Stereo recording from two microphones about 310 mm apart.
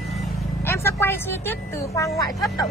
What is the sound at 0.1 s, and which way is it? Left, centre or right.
A woman's voice, centre.